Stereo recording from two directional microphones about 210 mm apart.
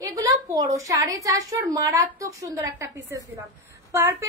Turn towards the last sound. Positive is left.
turn(degrees=-15)  # may be behind; listen again after turning